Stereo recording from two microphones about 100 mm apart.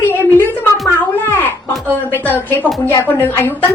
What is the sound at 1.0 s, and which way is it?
A woman's voice, 20° left (ahead or behind).